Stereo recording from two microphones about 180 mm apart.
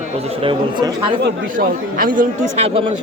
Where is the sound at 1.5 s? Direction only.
50° right (ahead or behind).